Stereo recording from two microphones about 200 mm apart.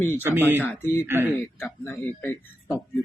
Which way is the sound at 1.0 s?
10° right (ahead or behind).